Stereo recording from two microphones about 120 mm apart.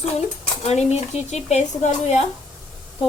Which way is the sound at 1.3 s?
70° left (ahead or behind).